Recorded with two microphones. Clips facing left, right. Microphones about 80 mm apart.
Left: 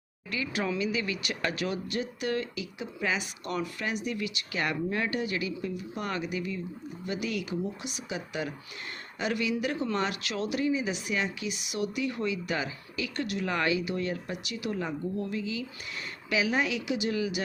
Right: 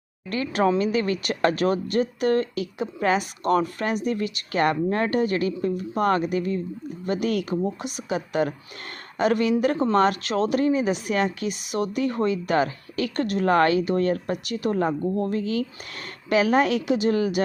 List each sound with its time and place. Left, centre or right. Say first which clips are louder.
0.3 s speech: right 9 dB; right